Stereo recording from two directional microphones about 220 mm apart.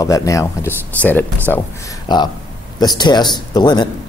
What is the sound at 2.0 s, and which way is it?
A man's voice, 20° left (ahead or behind).